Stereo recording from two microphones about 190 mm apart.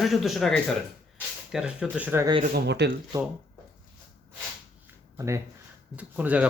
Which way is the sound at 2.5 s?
60° right (ahead or behind).